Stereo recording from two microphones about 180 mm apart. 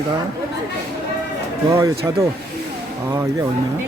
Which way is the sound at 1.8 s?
20° right (ahead or behind).